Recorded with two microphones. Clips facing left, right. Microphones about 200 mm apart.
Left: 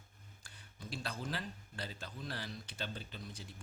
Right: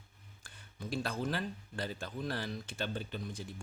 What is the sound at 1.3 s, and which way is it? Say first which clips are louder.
Speech: right 6 dB; 55° right (ahead or behind).